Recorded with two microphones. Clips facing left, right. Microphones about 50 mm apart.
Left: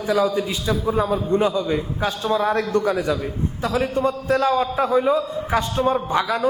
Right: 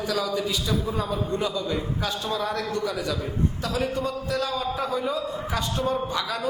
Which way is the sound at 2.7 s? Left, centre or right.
Left.